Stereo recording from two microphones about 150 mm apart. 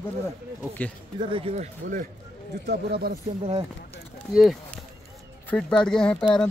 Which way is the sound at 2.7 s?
90° right.